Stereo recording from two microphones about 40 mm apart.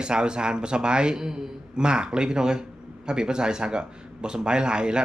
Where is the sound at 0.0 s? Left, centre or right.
Right.